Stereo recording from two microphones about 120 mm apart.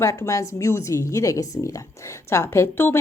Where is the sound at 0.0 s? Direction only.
25° left (ahead or behind).